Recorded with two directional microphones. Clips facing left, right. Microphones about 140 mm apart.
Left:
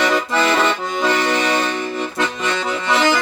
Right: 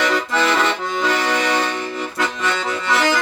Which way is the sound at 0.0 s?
20° left (ahead or behind).